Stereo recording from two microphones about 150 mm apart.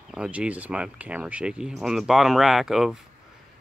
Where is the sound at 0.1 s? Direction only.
5° right (ahead or behind).